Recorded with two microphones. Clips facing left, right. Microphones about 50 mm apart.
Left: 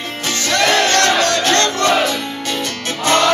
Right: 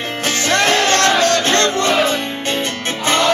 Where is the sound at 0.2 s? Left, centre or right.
Right.